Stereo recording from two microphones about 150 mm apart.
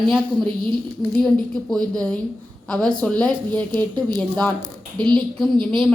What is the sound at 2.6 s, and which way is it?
A woman's voice, 5° left (ahead or behind).